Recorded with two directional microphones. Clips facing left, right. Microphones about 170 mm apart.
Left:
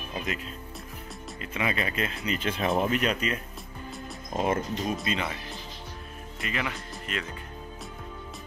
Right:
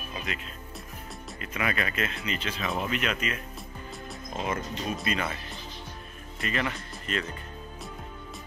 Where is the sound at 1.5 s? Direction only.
25° left (ahead or behind).